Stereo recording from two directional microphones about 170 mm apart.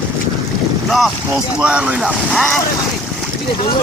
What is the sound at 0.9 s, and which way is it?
Speech, centre (ahead or behind).